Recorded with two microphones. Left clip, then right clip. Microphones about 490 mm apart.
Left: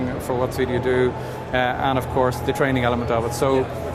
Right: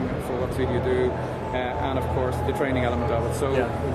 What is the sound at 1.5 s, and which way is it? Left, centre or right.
Speech, left.